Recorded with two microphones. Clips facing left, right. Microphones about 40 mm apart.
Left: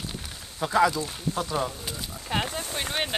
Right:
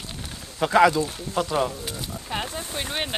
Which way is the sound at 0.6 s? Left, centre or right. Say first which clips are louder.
Right 5 dB; right.